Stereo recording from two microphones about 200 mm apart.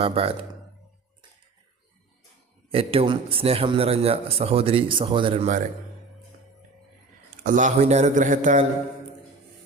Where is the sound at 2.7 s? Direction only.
30° right (ahead or behind).